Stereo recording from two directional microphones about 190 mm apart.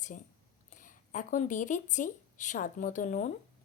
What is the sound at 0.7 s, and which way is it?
A woman's voice, 40° left (ahead or behind).